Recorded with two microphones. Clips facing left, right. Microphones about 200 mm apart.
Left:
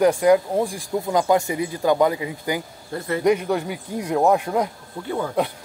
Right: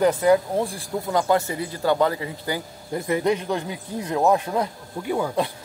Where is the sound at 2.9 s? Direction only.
15° right (ahead or behind).